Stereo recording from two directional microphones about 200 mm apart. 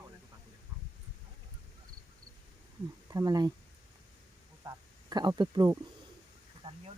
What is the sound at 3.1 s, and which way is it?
Speech, 20° right (ahead or behind).